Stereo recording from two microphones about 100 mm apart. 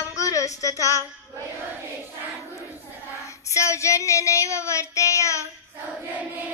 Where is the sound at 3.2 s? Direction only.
30° left (ahead or behind).